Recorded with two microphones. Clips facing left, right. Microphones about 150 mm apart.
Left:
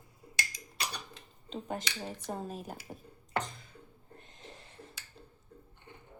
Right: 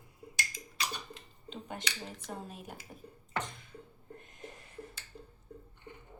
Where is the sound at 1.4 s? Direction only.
40° left (ahead or behind).